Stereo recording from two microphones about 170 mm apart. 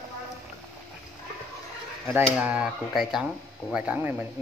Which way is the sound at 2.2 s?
5° right (ahead or behind).